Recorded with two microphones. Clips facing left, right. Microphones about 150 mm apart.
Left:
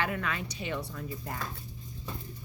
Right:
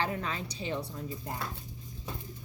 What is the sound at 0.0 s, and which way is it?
A woman's voice, 30° right (ahead or behind).